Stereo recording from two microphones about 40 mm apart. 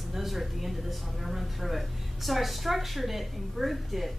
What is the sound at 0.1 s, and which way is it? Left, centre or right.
Speech, centre.